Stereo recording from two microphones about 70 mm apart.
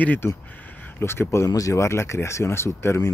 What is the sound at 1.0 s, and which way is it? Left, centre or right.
Speech, left.